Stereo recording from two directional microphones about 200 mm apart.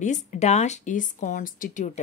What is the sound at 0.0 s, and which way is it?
A woman's voice, 35° left (ahead or behind).